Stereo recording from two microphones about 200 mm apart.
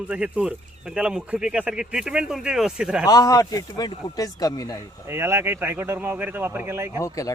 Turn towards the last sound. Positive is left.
turn(degrees=15)  # may be behind; listen again after turning